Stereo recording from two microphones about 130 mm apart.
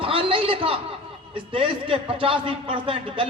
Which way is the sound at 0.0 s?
45° right (ahead or behind).